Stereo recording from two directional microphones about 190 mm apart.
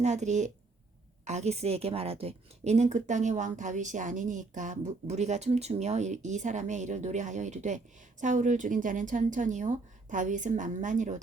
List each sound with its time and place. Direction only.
0.0 s a woman's voice: 40° right (ahead or behind)